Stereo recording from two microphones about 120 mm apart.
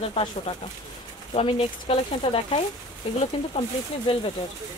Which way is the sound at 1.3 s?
55° left (ahead or behind).